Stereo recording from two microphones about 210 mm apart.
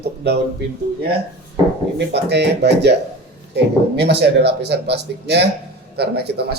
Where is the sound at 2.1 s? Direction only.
55° right (ahead or behind).